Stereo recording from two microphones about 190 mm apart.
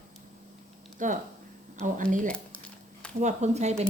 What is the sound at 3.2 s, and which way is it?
Speech, 40° right (ahead or behind).